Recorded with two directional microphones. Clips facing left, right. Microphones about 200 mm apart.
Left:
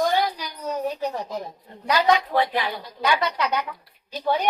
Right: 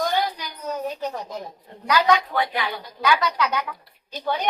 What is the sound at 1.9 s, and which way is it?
A woman's voice, 25° left (ahead or behind).